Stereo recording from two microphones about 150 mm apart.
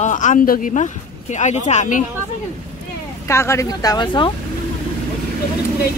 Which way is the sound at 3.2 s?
20° left (ahead or behind).